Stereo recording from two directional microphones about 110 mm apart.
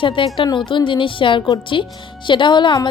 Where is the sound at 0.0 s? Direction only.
50° left (ahead or behind).